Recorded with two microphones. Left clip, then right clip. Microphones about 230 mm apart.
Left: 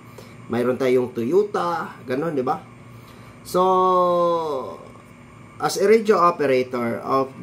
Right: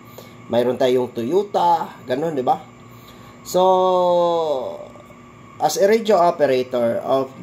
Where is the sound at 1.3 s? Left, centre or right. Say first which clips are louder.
Right 2 dB; left.